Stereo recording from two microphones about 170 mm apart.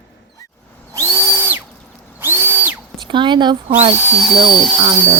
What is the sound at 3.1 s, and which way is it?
Speech, 25° right (ahead or behind).